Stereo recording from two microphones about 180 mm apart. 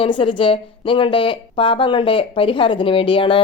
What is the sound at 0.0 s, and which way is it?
A woman's voice, 30° left (ahead or behind).